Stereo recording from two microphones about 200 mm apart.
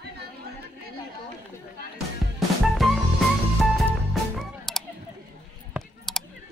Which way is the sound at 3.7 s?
Centre (ahead or behind).